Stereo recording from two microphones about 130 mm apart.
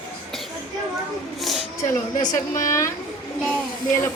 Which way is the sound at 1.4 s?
Centre (ahead or behind).